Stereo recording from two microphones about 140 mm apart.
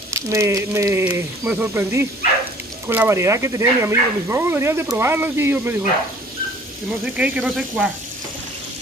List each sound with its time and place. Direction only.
0.1 s speech: 20° right (ahead or behind)
6.9 s speech: 10° right (ahead or behind)